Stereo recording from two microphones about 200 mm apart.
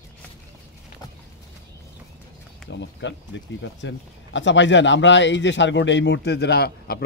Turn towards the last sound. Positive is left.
turn(degrees=55)  # may be behind; listen again after turning